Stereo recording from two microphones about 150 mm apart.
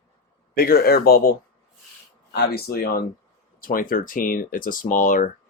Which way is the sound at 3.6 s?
70° left (ahead or behind).